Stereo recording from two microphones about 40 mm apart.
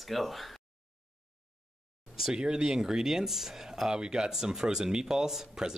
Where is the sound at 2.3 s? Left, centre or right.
Centre.